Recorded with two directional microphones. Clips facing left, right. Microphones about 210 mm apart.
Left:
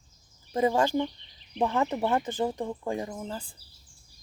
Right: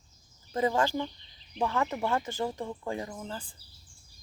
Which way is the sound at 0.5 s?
20° left (ahead or behind).